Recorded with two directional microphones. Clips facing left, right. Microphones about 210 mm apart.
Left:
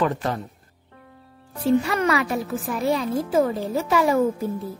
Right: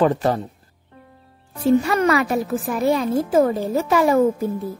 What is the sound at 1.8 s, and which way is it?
Speech, 45° right (ahead or behind).